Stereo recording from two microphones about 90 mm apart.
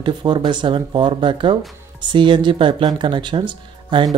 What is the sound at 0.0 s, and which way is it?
Speech, 65° right (ahead or behind).